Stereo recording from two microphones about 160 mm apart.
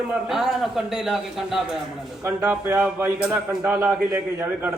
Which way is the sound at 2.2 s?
15° right (ahead or behind).